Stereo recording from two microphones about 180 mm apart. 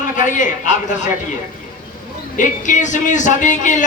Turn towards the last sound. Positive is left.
turn(degrees=45)  # may be behind; listen again after turning